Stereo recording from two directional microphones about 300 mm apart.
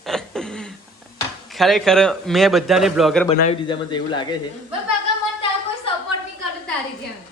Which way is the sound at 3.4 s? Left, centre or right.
Centre.